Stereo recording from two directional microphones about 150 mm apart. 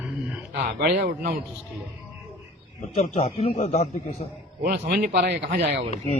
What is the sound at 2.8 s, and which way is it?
A man's voice, 50° left (ahead or behind).